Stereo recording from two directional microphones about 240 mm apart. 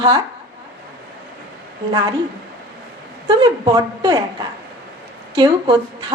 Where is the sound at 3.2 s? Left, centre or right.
Centre.